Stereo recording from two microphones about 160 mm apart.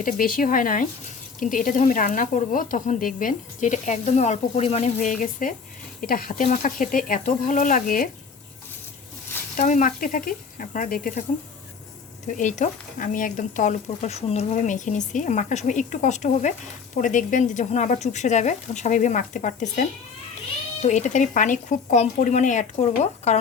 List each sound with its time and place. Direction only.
0.0 s speech: 60° left (ahead or behind)
9.6 s speech: 55° left (ahead or behind)